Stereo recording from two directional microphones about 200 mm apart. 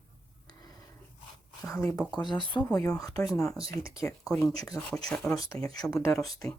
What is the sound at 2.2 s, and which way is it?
Speech, 20° left (ahead or behind).